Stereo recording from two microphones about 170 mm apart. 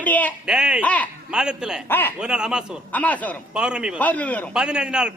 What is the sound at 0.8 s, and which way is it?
Speech, 10° left (ahead or behind).